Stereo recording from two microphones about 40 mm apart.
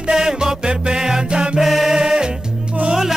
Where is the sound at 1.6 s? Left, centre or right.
Centre.